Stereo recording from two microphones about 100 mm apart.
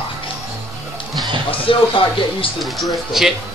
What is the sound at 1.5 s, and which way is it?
Speech, 60° left (ahead or behind).